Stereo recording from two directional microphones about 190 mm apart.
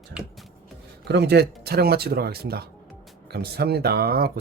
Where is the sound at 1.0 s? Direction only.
60° right (ahead or behind).